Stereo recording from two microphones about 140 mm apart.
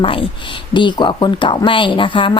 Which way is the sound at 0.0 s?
40° left (ahead or behind).